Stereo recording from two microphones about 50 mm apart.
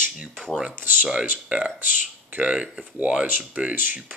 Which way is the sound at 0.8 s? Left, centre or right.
Right.